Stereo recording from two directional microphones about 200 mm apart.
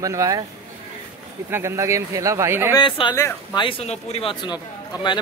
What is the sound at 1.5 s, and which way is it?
Speech, 15° right (ahead or behind).